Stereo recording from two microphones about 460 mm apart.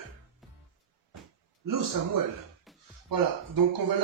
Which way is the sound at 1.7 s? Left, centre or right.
Right.